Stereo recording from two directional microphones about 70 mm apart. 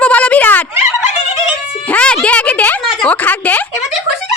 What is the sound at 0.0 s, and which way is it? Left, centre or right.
Fowl, centre.